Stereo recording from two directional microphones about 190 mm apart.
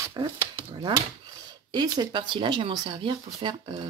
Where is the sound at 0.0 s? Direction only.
20° right (ahead or behind).